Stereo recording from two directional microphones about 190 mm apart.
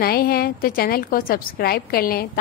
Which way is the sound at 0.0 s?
55° left (ahead or behind).